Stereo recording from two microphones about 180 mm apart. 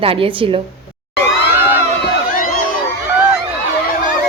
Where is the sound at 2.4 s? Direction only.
50° left (ahead or behind).